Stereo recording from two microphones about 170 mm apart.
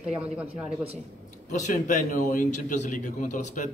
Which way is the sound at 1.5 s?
45° left (ahead or behind).